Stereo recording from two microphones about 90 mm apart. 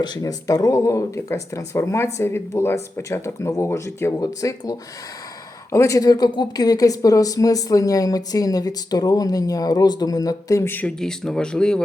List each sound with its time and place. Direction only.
0.0 s speech: 50° left (ahead or behind); by 4.1 s 30° left (ahead or behind)
4.2 s speech: 40° left (ahead or behind)
10.6 s speech: 20° left (ahead or behind)
11.0 s speech: 5° left (ahead or behind)